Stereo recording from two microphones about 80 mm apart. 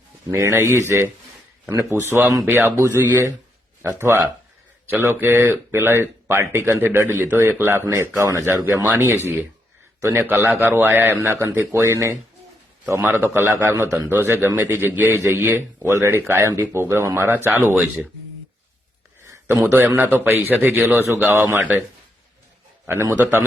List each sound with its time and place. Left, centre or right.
0.3 s a man's voice: right
8.6 s a man's voice: right
13.0 s a man's voice: right
19.5 s a man's voice: right
20.0 s speech: right